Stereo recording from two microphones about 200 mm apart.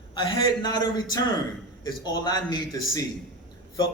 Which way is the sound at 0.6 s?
20° left (ahead or behind).